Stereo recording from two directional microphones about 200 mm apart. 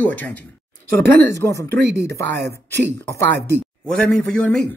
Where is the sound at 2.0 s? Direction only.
55° right (ahead or behind).